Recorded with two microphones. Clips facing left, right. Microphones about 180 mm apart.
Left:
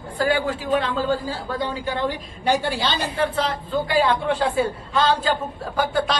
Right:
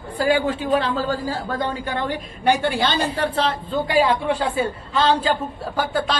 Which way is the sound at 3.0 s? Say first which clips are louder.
Right 1 dB; 35° right (ahead or behind).